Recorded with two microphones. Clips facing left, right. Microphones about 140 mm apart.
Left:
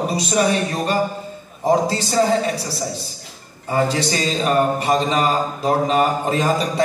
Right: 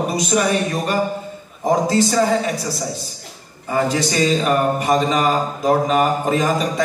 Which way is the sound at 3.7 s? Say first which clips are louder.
Right 1 dB; 30° left (ahead or behind).